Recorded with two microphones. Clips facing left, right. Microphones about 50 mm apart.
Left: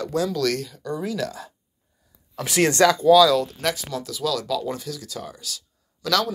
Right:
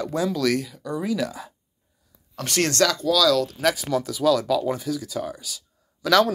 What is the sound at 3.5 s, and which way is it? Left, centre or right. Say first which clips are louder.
Speech: right 4 dB; centre.